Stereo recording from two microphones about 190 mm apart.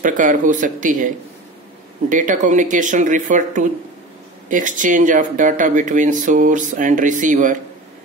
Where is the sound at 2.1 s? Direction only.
40° right (ahead or behind).